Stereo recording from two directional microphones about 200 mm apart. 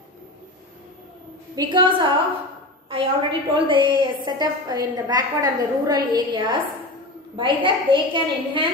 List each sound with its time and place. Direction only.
1.5 s a woman's voice: 20° right (ahead or behind)